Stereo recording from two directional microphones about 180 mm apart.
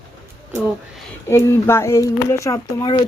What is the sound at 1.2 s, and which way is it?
Speech, 15° left (ahead or behind).